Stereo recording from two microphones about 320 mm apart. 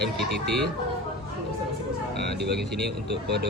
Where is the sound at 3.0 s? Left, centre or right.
Right.